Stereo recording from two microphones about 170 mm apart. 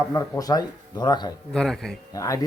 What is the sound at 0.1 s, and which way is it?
Speech, 20° left (ahead or behind).